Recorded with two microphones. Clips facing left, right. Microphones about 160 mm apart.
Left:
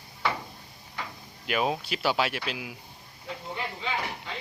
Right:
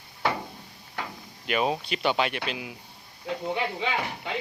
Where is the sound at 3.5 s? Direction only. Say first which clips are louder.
Right 1 dB; 80° right.